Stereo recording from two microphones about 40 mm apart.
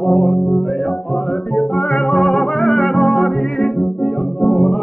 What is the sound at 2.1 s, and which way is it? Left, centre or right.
Music, centre.